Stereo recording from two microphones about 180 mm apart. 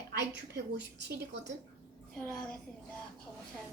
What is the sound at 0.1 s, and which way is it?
A woman's voice, 70° right (ahead or behind).